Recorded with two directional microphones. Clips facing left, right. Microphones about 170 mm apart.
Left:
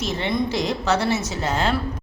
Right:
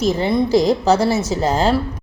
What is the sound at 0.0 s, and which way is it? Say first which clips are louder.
A woman's voice: right 7 dB; 40° right (ahead or behind).